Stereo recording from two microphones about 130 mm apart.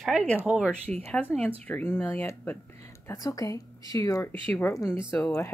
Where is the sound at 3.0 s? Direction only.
25° left (ahead or behind).